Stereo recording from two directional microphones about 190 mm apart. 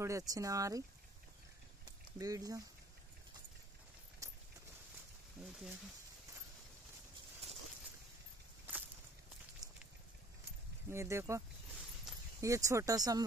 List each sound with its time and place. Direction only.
0.0 s speech: 15° right (ahead or behind)
1.9 s a sound: 20° right (ahead or behind)
4.2 s clip-clop: 15° right (ahead or behind)
5.4 s speech: 5° right (ahead or behind)
9.6 s a sound: centre (ahead or behind)
10.9 s speech: 15° right (ahead or behind)